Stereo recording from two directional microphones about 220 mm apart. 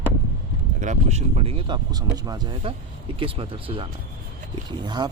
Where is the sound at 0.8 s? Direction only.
30° right (ahead or behind).